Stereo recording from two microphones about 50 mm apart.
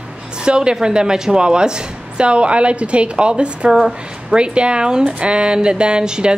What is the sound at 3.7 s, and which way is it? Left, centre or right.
Speech, centre.